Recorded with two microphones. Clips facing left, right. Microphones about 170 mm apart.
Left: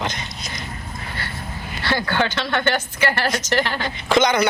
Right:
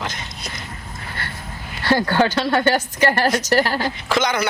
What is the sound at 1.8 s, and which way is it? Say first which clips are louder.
A woman's voice: right 4 dB; 40° right (ahead or behind).